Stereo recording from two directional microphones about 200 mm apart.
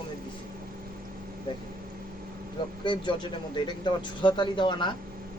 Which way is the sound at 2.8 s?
25° left (ahead or behind).